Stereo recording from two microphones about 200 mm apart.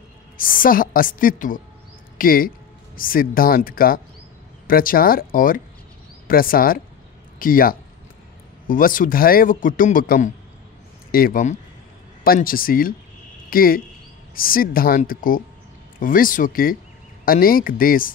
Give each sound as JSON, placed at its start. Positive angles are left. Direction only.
{"t": 0.4, "sound": "a man's voice", "side_deg": 45}